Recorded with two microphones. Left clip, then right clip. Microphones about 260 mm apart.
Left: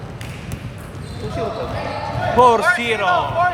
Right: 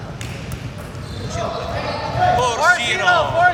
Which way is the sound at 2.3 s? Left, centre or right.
Left.